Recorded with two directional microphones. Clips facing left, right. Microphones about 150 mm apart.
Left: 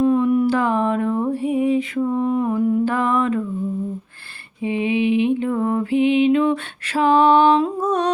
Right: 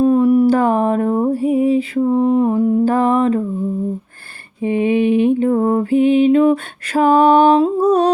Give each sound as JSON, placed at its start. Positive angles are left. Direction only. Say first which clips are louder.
{"t": 0.0, "sound": "a sound", "louder": "right 5 dB", "side_deg": -35}
{"t": 4.6, "sound": "mantra", "louder": "right 5 dB", "side_deg": -50}
{"t": 7.6, "sound": "humming", "louder": "right 7 dB", "side_deg": -30}